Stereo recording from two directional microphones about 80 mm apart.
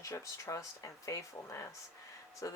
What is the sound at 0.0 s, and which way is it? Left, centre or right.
Speech, left.